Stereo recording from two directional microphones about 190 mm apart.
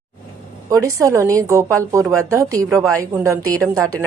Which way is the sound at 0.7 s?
15° right (ahead or behind).